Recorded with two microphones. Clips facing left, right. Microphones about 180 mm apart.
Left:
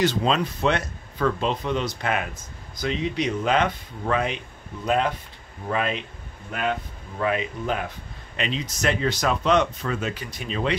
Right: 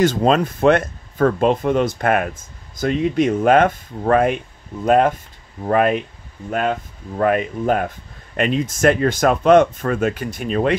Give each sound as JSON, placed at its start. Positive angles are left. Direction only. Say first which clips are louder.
{"t": 0.0, "sound": "speech", "louder": "right 6 dB", "side_deg": -50}
{"t": 7.2, "sound": "speech", "louder": "right 7 dB", "side_deg": -50}